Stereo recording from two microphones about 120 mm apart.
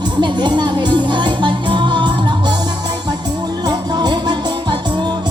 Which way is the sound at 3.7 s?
35° right (ahead or behind).